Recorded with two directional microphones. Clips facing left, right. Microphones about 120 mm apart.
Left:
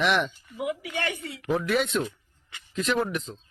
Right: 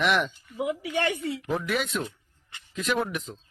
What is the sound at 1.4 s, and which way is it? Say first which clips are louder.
Speech: left 5 dB; centre (ahead or behind).